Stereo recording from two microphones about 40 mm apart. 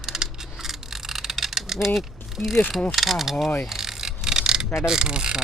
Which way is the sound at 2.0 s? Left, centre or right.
Centre.